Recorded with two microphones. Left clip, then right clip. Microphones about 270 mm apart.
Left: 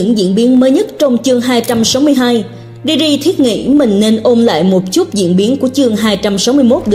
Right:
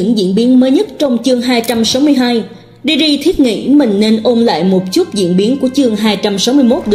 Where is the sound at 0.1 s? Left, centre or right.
Left.